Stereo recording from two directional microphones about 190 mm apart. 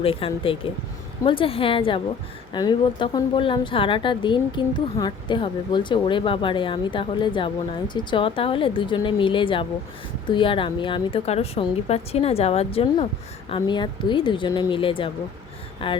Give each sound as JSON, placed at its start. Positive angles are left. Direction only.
{"t": 0.0, "sound": "a woman's voice", "side_deg": 30}